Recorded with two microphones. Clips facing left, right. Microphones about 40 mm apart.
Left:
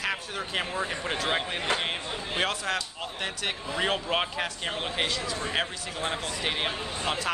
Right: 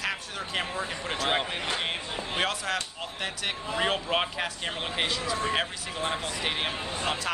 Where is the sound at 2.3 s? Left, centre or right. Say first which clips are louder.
Left 1 dB; centre.